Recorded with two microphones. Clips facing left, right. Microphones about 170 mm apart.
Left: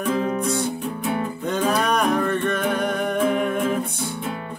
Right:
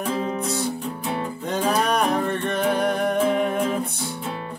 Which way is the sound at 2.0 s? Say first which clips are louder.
Left 1 dB; 30° right (ahead or behind).